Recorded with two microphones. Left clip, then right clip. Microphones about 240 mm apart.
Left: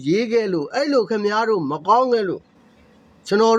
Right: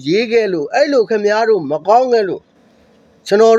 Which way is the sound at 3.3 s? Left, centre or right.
Centre.